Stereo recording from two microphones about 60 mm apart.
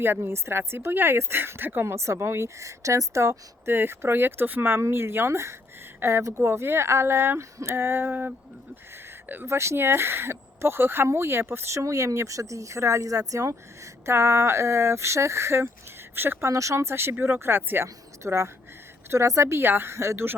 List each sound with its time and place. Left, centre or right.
0.0 s speech: right
3.7 s speech: right
4.8 s speech: right
9.5 s speech: right
16.1 s speech: right
16.5 s speech: right
17.8 s a woman's voice: right